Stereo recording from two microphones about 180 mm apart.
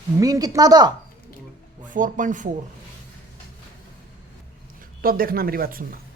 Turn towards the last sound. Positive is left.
turn(degrees=-55)  # may be behind; listen again after turning